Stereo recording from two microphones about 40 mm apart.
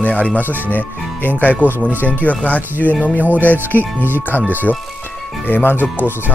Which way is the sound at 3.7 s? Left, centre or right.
Left.